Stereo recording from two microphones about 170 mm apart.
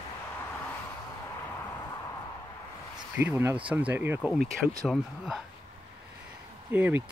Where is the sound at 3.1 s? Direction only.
10° right (ahead or behind).